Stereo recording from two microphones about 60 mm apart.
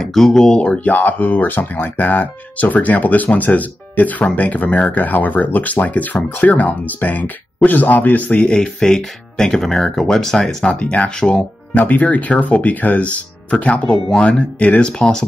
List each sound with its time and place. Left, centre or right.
0.0 s speech: centre
0.6 s speech: left
8.8 s speech: centre
10.7 s speech: left
11.8 s speech: left; by 15.2 s centre